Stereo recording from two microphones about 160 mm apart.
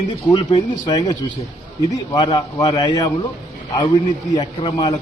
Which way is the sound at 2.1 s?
25° left (ahead or behind).